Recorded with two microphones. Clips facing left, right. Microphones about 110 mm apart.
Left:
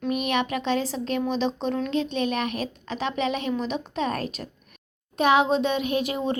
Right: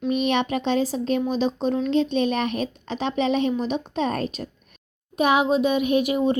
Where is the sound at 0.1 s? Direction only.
25° right (ahead or behind).